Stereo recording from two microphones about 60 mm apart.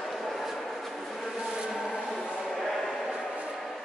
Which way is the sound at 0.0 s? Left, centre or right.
Centre.